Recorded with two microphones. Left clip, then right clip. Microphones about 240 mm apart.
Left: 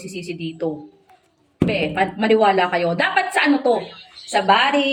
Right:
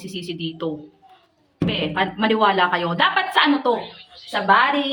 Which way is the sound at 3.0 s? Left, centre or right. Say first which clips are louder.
Right 3 dB; right.